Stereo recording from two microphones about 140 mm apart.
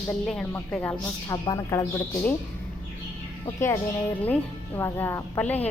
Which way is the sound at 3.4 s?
20° left (ahead or behind).